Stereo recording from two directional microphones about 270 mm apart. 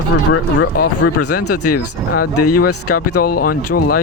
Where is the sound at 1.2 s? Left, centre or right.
Left.